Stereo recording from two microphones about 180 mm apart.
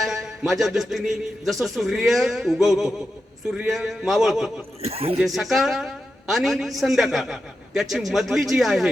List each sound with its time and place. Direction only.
0.0 s a man's voice: centre (ahead or behind)
4.8 s speech: 35° right (ahead or behind)
5.2 s a man's voice: centre (ahead or behind)